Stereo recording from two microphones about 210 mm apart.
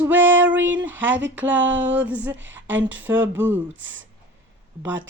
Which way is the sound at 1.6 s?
60° right (ahead or behind).